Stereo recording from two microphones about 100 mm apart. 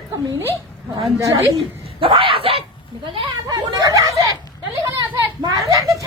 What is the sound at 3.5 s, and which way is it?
Speech, 35° right (ahead or behind).